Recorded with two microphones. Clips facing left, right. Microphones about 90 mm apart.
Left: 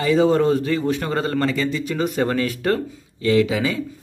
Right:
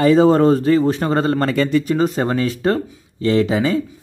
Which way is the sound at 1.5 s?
55° right (ahead or behind).